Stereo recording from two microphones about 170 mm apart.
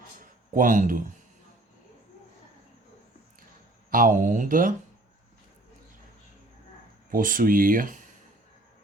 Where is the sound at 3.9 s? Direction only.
55° right (ahead or behind).